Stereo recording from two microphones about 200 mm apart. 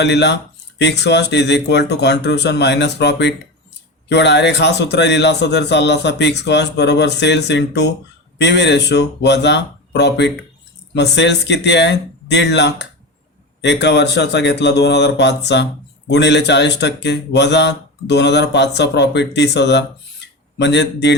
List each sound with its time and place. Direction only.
0.0 s a man's voice: 60° left (ahead or behind)